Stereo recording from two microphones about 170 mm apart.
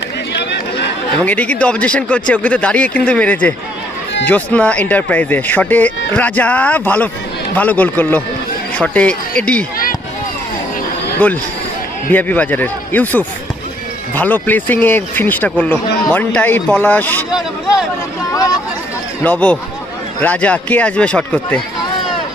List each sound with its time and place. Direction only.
0.3 s a sound: 85° left
1.2 s speech: 10° left (ahead or behind)
11.2 s speech: 10° left (ahead or behind)
19.2 s speech: 10° left (ahead or behind)